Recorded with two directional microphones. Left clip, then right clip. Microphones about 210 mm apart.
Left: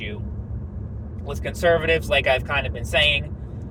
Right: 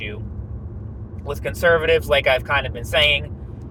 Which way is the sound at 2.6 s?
25° right (ahead or behind).